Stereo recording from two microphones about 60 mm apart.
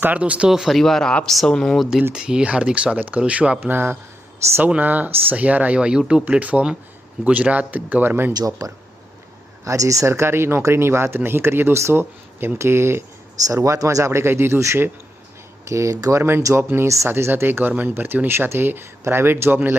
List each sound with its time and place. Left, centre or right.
0.0 s speech: right
0.4 s speech: centre
0.8 s speech: centre
2.1 s speech: centre
3.6 s speech: right
8.3 s speech: right
10.1 s speech: right
13.7 s speech: right
15.7 s speech: right
16.6 s speech: right
17.1 s speech: right